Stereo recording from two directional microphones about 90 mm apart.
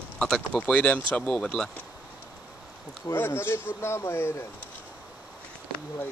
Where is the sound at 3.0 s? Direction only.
30° left (ahead or behind).